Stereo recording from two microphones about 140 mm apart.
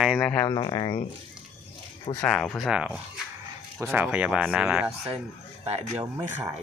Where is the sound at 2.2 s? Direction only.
5° left (ahead or behind).